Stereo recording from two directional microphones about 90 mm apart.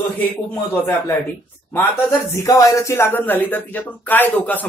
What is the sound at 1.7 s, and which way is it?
Speech, 25° left (ahead or behind).